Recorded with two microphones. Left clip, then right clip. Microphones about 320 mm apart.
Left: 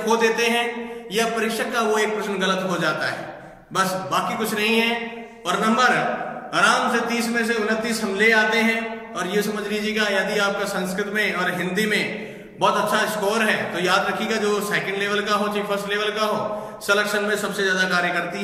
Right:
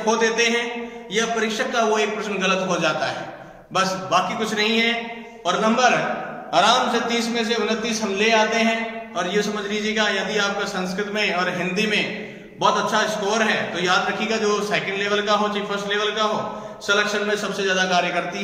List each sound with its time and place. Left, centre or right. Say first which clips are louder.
0.0 s a man's voice: even; centre
1.7 s a man's voice: right 1 dB; centre
6.5 s a man's voice: right 1 dB; centre